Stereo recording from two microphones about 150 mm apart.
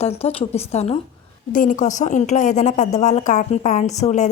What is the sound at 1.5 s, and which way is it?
A woman's voice, 60° left (ahead or behind).